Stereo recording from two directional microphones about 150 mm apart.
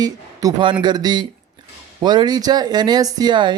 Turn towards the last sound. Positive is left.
turn(degrees=-30)  # may be behind; listen again after turning